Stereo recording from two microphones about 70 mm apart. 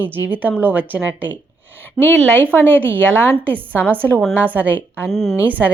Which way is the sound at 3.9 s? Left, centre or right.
Right.